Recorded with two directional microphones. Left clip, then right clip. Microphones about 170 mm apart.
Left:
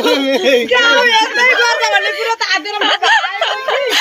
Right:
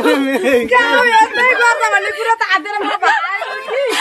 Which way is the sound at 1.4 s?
10° right (ahead or behind).